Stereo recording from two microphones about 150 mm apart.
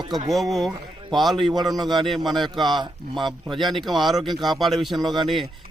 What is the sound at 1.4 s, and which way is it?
Speech, 35° right (ahead or behind).